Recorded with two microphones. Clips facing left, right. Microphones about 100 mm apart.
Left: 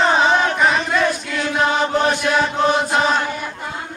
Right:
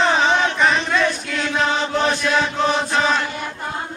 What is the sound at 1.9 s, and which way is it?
Chant, 15° left (ahead or behind).